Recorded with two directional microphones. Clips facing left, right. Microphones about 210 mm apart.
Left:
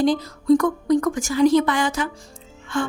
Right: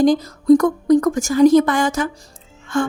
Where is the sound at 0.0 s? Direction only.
45° right (ahead or behind).